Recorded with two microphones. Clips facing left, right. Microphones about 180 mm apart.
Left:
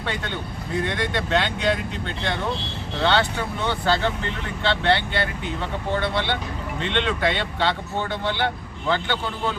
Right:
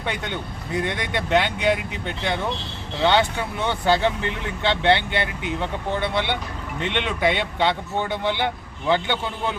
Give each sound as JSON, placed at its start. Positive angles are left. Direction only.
{"t": 0.0, "sound": "speech", "side_deg": -15}